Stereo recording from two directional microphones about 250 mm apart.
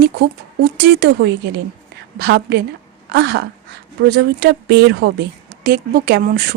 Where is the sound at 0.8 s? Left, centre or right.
Right.